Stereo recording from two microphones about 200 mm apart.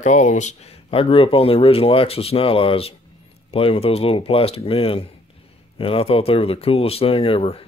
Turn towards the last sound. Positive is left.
turn(degrees=30)  # may be behind; listen again after turning